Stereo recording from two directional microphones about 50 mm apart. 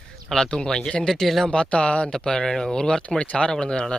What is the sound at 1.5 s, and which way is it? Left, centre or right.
Speech, left.